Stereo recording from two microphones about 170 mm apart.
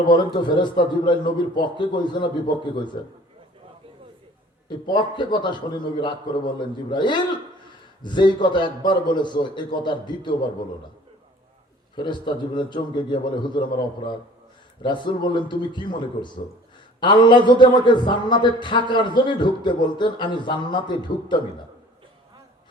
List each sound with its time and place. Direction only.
0.0 s speech: 25° left (ahead or behind)
4.9 s speech: 25° left (ahead or behind)
11.9 s speech: 25° left (ahead or behind)
14.8 s speech: 25° left (ahead or behind)